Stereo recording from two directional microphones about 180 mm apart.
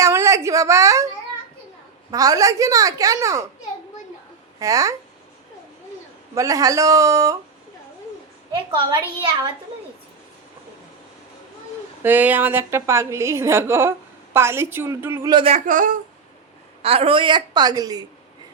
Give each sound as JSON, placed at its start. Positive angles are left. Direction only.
{"t": 0.0, "sound": "a woman's voice", "side_deg": -15}
{"t": 2.0, "sound": "a woman's voice", "side_deg": -20}
{"t": 4.6, "sound": "a woman's voice", "side_deg": -20}
{"t": 6.3, "sound": "a woman's voice", "side_deg": -20}
{"t": 8.7, "sound": "a woman's voice", "side_deg": -25}
{"t": 12.0, "sound": "a woman's voice", "side_deg": -10}
{"t": 15.3, "sound": "a woman's voice", "side_deg": -25}
{"t": 15.5, "sound": "a woman's voice", "side_deg": -45}
{"t": 16.8, "sound": "a woman's voice", "side_deg": -35}